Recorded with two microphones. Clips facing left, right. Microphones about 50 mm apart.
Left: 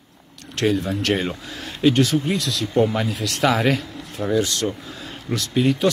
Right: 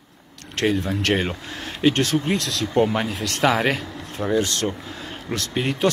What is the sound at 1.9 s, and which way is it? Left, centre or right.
Speech, right.